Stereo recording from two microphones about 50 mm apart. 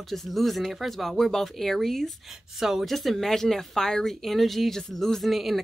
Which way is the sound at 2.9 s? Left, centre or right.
Centre.